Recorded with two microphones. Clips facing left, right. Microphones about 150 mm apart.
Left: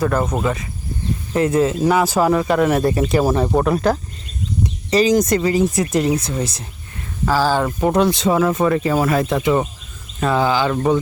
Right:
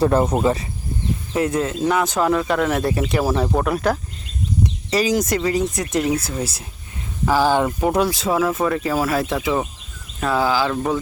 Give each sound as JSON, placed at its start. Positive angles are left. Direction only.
{"t": 0.0, "sound": "speech", "side_deg": -30}
{"t": 1.3, "sound": "speech", "side_deg": 0}
{"t": 7.3, "sound": "speech", "side_deg": -15}
{"t": 7.8, "sound": "speech", "side_deg": -5}